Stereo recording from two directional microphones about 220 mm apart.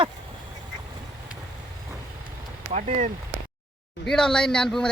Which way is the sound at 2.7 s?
35° right (ahead or behind).